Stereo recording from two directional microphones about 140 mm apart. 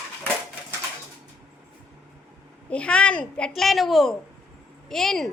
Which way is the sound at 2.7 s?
10° left (ahead or behind).